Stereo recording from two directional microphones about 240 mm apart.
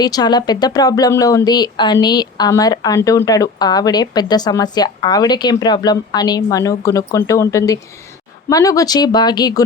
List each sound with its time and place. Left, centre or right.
0.0 s speech: centre